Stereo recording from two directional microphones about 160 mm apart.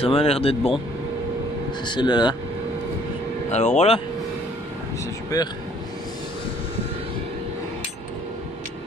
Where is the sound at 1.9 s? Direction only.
30° left (ahead or behind).